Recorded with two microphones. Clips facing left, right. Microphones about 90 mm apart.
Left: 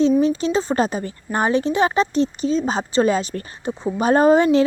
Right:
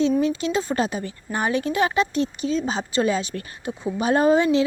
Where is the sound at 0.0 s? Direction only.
35° left (ahead or behind).